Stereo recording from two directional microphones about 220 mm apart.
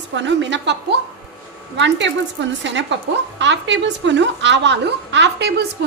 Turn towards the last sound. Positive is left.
turn(degrees=-50)  # may be behind; listen again after turning